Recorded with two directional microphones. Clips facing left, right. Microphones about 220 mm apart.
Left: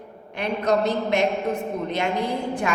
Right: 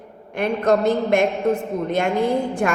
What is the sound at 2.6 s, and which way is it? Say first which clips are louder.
Speech: right 3 dB; 50° right (ahead or behind).